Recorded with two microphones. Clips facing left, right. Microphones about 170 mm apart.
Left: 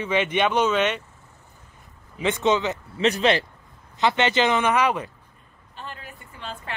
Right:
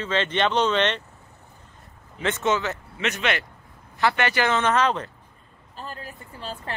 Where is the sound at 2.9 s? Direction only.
30° left (ahead or behind).